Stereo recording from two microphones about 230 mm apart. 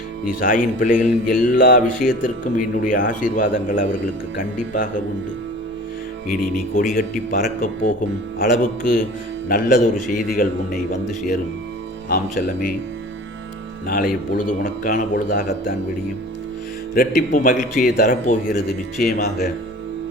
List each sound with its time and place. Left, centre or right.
0.3 s a man's voice: left
6.2 s a man's voice: left
12.0 s a man's voice: left
13.8 s a man's voice: left
16.9 s a man's voice: left